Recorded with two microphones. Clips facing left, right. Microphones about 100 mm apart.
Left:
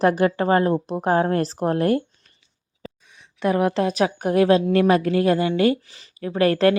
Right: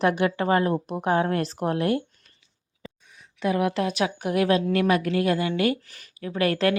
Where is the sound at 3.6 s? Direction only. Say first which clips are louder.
Left 4 dB; 35° left (ahead or behind).